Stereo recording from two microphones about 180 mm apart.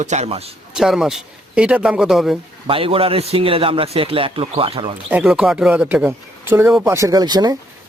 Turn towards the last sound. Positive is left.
turn(degrees=-20)  # may be behind; listen again after turning